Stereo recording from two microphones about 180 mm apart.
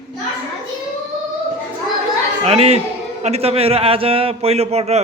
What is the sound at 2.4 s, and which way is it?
A man's voice, 35° right (ahead or behind).